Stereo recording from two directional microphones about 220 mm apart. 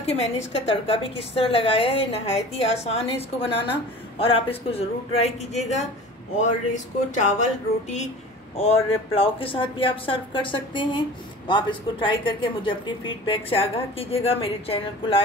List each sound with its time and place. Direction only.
0.1 s speech: 25° left (ahead or behind)